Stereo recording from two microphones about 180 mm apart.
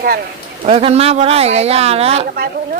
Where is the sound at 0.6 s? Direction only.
35° right (ahead or behind).